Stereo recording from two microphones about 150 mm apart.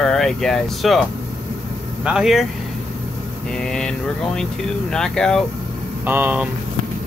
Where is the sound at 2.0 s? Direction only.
5° right (ahead or behind).